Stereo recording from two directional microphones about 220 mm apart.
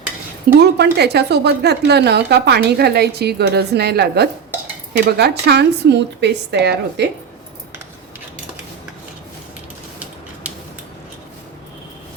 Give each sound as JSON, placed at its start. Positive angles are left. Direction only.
{"t": 0.6, "sound": "a woman's voice", "side_deg": -50}